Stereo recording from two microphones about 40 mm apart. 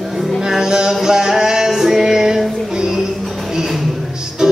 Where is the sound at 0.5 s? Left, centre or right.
Centre.